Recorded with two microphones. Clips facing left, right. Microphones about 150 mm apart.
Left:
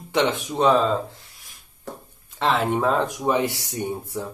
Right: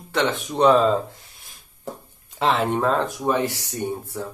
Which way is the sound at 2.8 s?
15° left (ahead or behind).